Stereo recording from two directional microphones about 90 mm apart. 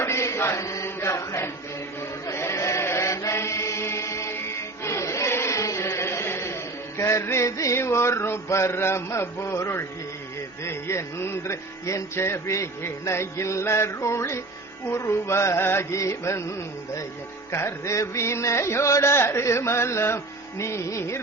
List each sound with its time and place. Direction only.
0.0 s chant: 30° left (ahead or behind)
10.6 s music: 30° left (ahead or behind)
17.5 s music: 30° left (ahead or behind)